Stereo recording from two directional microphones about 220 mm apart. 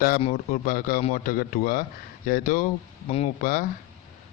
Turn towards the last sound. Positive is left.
turn(degrees=40)  # may be behind; listen again after turning